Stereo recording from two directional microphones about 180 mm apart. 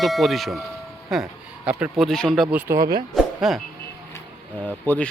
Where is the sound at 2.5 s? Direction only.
20° right (ahead or behind).